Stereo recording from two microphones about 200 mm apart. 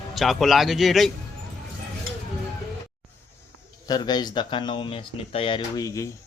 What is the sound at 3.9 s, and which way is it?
Speech, 20° left (ahead or behind).